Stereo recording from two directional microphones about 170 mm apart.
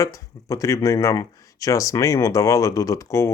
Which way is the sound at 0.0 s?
20° left (ahead or behind).